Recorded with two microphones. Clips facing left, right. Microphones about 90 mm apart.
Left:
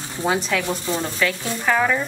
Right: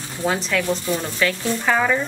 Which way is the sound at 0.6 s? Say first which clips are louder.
Right 2 dB; 15° left (ahead or behind).